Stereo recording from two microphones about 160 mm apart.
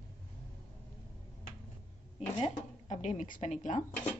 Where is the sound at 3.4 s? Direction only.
45° left (ahead or behind).